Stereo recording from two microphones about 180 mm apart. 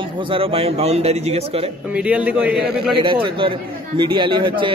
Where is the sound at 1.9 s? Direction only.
5° right (ahead or behind).